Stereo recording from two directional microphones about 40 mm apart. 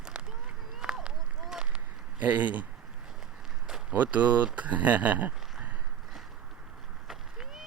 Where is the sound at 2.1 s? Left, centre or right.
Right.